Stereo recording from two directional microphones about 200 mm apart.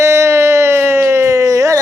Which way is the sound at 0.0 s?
15° right (ahead or behind).